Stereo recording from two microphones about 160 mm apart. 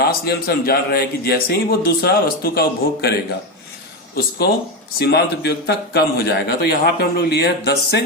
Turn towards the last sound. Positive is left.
turn(degrees=90)